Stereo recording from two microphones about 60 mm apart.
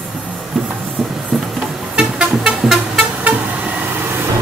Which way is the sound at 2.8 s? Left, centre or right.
Right.